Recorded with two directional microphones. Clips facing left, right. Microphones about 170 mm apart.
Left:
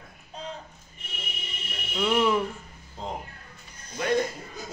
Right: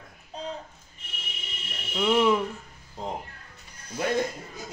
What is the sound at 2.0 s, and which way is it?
Speech, 10° right (ahead or behind).